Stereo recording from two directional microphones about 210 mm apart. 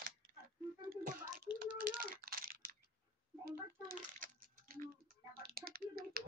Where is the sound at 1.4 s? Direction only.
45° right (ahead or behind).